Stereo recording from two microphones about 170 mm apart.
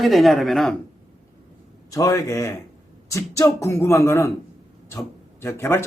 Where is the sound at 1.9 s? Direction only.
20° left (ahead or behind).